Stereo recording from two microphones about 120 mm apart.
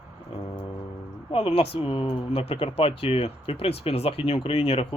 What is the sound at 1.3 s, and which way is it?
Speech, 50° left (ahead or behind).